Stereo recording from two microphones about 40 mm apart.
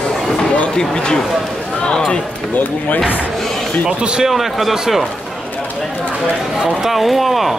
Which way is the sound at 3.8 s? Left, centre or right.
Right.